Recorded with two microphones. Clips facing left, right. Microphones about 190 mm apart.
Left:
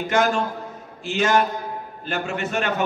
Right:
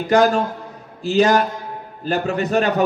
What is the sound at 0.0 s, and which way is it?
A man's voice, 35° right (ahead or behind).